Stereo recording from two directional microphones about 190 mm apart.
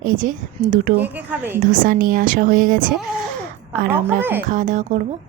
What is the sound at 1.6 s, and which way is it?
Speech, 45° right (ahead or behind).